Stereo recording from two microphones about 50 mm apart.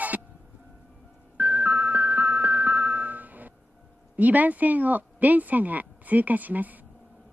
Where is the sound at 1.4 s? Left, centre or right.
Right.